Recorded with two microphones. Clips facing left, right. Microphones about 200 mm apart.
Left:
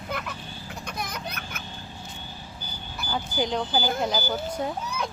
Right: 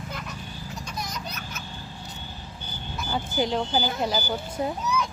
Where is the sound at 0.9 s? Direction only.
55° left (ahead or behind).